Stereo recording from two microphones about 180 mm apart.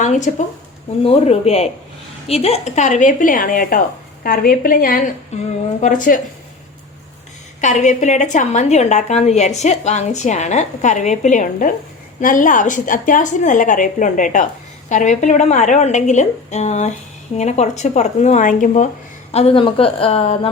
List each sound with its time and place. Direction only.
0.0 s a woman's voice: 40° left (ahead or behind)
7.6 s a woman's voice: 45° left (ahead or behind)